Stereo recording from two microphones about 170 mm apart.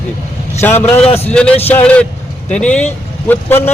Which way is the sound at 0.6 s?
10° left (ahead or behind).